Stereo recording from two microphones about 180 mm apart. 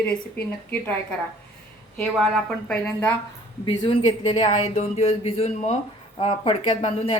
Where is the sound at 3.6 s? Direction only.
25° left (ahead or behind).